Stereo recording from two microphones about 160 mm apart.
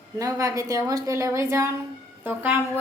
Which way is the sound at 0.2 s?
20° right (ahead or behind).